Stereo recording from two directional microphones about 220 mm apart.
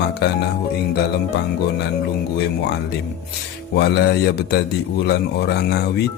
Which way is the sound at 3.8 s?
45° left (ahead or behind).